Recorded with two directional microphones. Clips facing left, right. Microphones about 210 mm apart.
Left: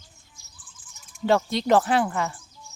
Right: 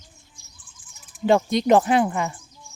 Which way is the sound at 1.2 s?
15° right (ahead or behind).